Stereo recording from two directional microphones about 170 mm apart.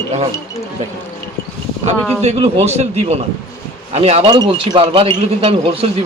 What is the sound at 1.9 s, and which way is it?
Speech, 10° left (ahead or behind).